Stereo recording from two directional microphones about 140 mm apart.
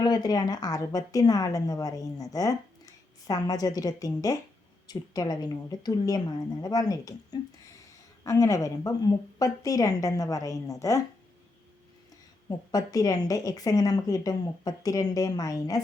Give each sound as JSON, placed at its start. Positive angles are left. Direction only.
{"t": 0.0, "sound": "a woman's voice", "side_deg": 30}
{"t": 12.5, "sound": "a woman's voice", "side_deg": 25}